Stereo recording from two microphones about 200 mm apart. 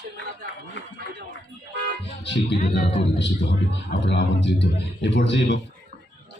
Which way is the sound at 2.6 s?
40° left (ahead or behind).